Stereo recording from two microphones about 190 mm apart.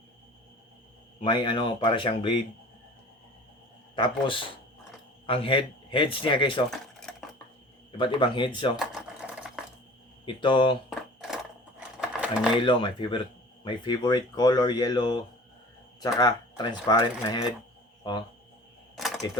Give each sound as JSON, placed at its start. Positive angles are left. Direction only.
{"t": 1.2, "sound": "speech", "side_deg": 25}
{"t": 3.9, "sound": "speech", "side_deg": 25}
{"t": 6.7, "sound": "a sound", "side_deg": 5}
{"t": 7.9, "sound": "speech", "side_deg": 25}
{"t": 8.7, "sound": "sewing machine", "side_deg": -5}
{"t": 10.2, "sound": "speech", "side_deg": 25}
{"t": 10.8, "sound": "a sound", "side_deg": 0}
{"t": 11.9, "sound": "sewing machine", "side_deg": -5}
{"t": 12.5, "sound": "speech", "side_deg": 25}
{"t": 18.9, "sound": "a sound", "side_deg": 0}